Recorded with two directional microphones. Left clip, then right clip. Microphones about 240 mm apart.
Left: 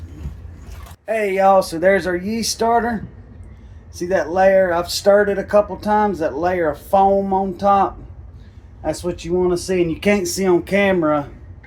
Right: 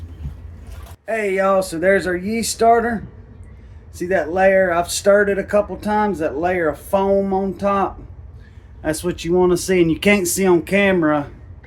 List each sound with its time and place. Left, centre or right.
1.0 s speech: centre
8.8 s speech: right